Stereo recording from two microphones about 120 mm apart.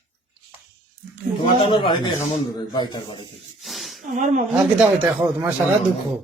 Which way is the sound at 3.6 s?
Centre (ahead or behind).